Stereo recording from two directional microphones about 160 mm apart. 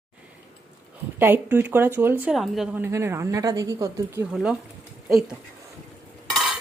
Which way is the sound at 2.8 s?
15° right (ahead or behind).